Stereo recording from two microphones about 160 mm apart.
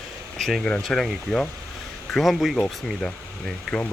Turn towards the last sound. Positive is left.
turn(degrees=5)  # may be behind; listen again after turning